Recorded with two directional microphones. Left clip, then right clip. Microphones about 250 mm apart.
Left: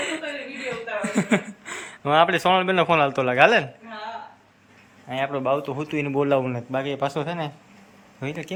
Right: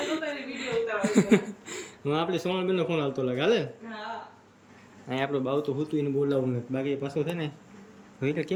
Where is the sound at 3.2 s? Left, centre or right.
Centre.